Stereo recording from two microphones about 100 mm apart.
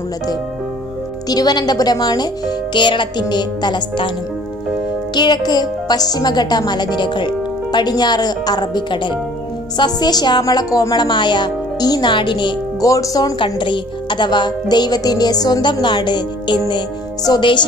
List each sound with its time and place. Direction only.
1.3 s speech: 40° left (ahead or behind)
5.1 s speech: 45° left (ahead or behind)
11.1 s speech: 50° left (ahead or behind)
12.8 s speech: 35° left (ahead or behind)
13.4 s speech: 50° left (ahead or behind)